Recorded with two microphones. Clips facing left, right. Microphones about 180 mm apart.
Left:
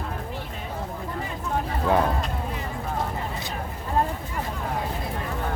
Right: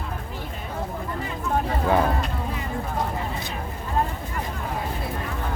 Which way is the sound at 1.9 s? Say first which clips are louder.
Even; centre (ahead or behind).